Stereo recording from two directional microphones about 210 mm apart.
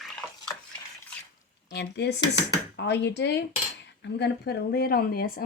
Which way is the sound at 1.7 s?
55° left (ahead or behind).